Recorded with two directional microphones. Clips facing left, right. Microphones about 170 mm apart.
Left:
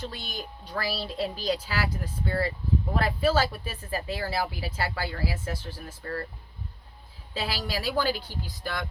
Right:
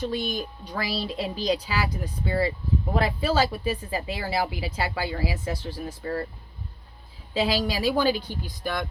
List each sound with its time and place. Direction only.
0.0 s speech: 20° right (ahead or behind)
7.3 s speech: 15° right (ahead or behind)